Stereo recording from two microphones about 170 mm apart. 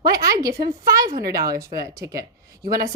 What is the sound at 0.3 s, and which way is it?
Speech, 20° right (ahead or behind).